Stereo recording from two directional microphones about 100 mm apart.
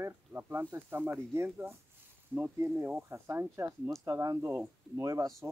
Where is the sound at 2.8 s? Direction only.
25° right (ahead or behind).